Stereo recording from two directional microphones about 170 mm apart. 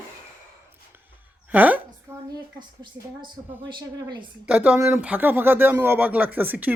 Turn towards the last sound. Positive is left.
turn(degrees=-10)  # may be behind; listen again after turning